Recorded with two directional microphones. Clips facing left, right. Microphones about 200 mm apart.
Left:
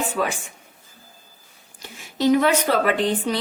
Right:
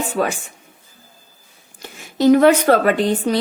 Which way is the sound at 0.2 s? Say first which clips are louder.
Right 5 dB; 40° right (ahead or behind).